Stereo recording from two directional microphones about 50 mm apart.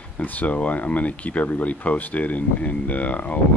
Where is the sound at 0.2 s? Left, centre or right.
Left.